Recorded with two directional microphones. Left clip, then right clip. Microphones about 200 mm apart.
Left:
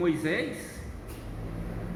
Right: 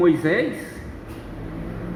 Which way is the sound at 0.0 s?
50° right (ahead or behind).